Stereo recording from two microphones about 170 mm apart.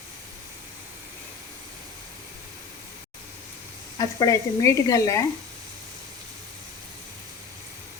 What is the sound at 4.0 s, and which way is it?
Speech, 20° left (ahead or behind).